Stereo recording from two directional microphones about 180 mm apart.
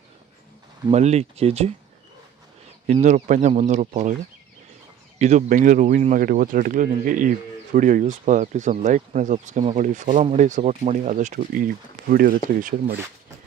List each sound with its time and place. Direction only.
0.9 s speech: 35° right (ahead or behind)
2.9 s speech: 40° right (ahead or behind)
5.2 s speech: 45° right (ahead or behind)